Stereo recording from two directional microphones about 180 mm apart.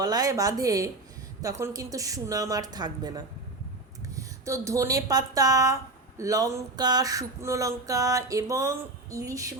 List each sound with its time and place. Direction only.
0.0 s speech: 20° right (ahead or behind)